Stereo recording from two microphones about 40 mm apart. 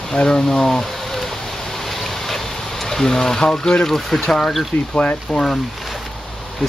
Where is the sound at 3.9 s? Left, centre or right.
Centre.